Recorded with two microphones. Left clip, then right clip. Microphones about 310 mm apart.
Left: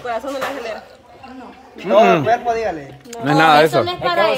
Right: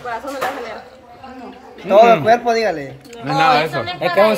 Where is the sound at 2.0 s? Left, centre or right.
Centre.